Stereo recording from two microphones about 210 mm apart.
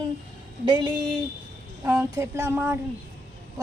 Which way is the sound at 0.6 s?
20° right (ahead or behind).